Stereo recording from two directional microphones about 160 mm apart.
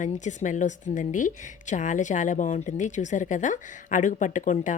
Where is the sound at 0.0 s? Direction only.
50° left (ahead or behind).